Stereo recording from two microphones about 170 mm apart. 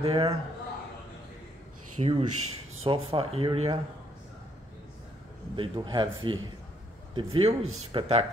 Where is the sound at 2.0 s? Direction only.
35° right (ahead or behind).